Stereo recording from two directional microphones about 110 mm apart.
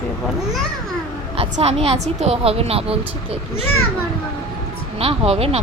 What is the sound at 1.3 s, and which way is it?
A woman's voice, 80° right.